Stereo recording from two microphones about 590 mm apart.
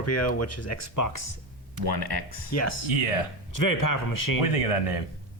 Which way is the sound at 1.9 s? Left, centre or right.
Right.